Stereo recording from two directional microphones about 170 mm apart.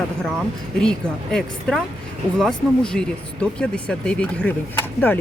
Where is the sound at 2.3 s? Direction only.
5° left (ahead or behind).